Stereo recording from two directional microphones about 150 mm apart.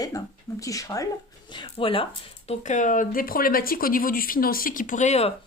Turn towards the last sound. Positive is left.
turn(degrees=50)  # may be behind; listen again after turning